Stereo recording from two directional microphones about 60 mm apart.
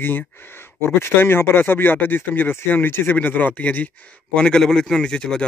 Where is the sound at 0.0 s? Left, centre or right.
Left.